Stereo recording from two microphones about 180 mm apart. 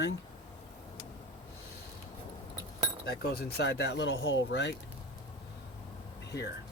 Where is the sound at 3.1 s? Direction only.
65° left (ahead or behind).